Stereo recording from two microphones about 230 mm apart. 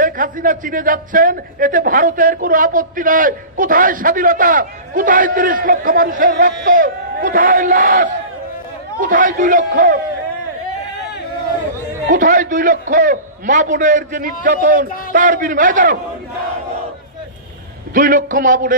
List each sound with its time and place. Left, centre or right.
0.0 s a man's voice: right
12.1 s a man's voice: right
17.9 s a man's voice: right